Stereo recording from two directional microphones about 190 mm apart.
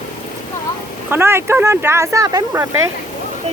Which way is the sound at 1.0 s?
10° right (ahead or behind).